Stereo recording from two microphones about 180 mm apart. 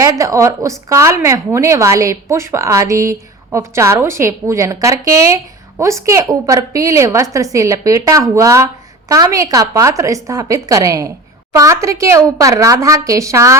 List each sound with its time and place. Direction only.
0.0 s a woman's voice: 15° right (ahead or behind)